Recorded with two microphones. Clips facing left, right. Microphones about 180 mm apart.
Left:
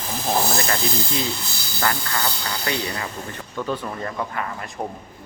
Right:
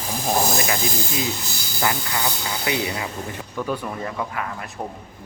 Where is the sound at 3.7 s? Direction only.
5° right (ahead or behind).